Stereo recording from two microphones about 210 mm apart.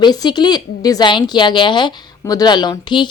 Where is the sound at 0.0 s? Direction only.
20° left (ahead or behind).